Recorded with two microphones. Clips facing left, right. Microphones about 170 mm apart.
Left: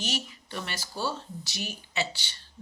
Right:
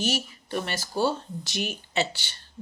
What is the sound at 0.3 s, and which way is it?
Speech, 50° right (ahead or behind).